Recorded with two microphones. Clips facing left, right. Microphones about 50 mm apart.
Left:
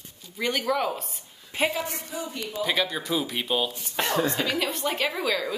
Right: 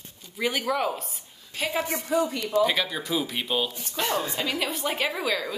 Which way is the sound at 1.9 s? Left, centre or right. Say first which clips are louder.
Right 9 dB; right.